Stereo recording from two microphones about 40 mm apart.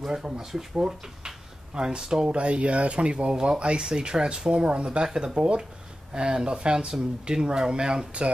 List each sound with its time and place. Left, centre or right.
0.0 s speech: centre
1.8 s speech: centre
2.3 s speech: right